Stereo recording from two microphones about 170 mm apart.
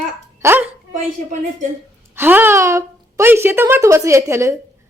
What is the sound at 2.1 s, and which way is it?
A woman's voice, 10° right (ahead or behind).